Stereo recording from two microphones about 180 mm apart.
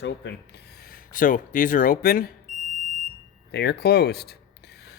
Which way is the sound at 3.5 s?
70° left (ahead or behind).